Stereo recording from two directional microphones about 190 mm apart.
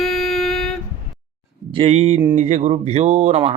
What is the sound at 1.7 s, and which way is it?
Speech, 30° right (ahead or behind).